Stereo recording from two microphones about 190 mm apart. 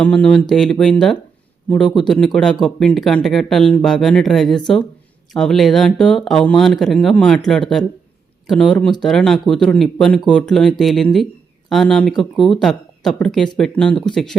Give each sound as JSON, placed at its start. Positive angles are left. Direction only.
{"t": 0.0, "sound": "speech", "side_deg": 5}